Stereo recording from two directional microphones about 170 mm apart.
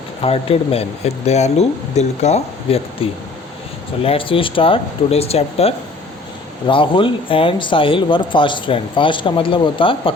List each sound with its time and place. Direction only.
0.2 s speech: 35° left (ahead or behind)